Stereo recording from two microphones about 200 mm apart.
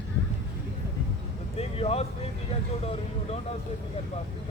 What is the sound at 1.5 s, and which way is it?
Speech, 30° left (ahead or behind).